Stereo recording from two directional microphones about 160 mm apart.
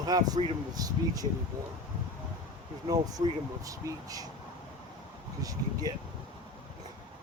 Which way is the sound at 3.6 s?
20° right (ahead or behind).